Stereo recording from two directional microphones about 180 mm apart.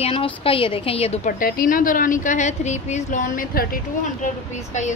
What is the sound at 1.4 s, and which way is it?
A woman's voice, 50° left (ahead or behind).